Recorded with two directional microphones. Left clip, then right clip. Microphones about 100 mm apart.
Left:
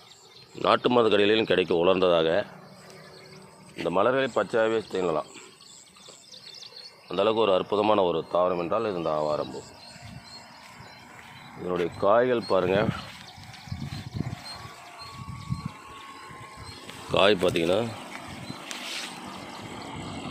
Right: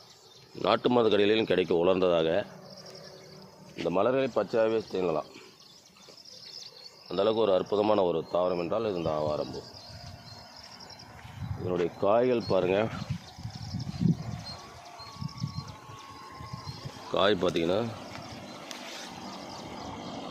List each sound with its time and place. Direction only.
0.6 s a man's voice: centre (ahead or behind)
3.8 s a man's voice: centre (ahead or behind)
7.1 s a man's voice: 5° left (ahead or behind)
11.6 s a man's voice: 5° right (ahead or behind)
17.1 s a man's voice: 5° left (ahead or behind)
17.9 s vehicle: 10° right (ahead or behind)
18.8 s boat: 20° left (ahead or behind)
19.2 s vehicle: 20° right (ahead or behind)
19.8 s vehicle: 40° right (ahead or behind)